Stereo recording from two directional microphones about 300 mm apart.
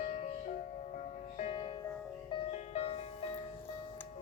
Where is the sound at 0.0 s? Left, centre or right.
Left.